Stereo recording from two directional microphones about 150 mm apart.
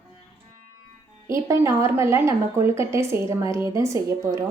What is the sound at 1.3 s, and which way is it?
Speech, 20° right (ahead or behind).